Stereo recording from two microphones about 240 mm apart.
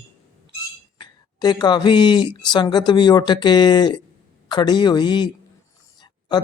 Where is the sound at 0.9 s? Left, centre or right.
Centre.